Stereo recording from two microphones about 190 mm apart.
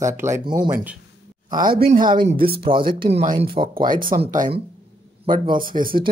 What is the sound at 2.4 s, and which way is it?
A man's voice, 30° right (ahead or behind).